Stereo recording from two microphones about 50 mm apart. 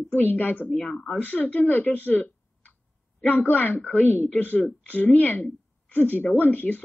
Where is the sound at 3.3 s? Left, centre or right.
Left.